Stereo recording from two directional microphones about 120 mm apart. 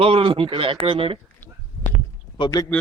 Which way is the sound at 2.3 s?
35° left (ahead or behind).